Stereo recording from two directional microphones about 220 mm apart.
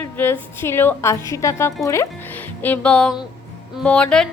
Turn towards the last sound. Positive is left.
turn(degrees=5)  # may be behind; listen again after turning